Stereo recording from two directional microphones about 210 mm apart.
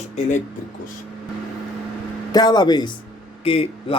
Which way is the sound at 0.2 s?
35° left (ahead or behind).